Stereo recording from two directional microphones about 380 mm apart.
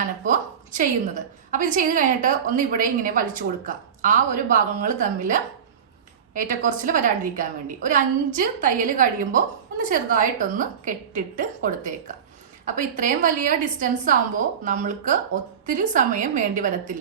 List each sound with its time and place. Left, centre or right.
0.3 s a woman's voice: centre